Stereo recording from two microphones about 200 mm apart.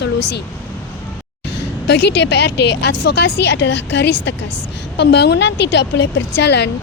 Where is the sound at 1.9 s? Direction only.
55° left (ahead or behind).